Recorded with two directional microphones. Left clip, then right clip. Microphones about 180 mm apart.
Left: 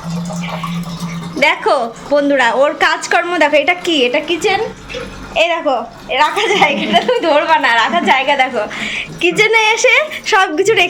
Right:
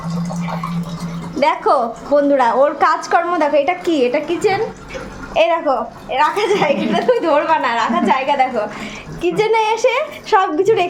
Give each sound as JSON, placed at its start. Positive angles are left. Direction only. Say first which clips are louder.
{"t": 1.4, "sound": "a woman's voice", "louder": "left 2 dB", "side_deg": -5}
{"t": 3.8, "sound": "a woman's voice", "louder": "left 2 dB", "side_deg": -10}
{"t": 5.6, "sound": "a woman's voice", "louder": "left 2 dB", "side_deg": 5}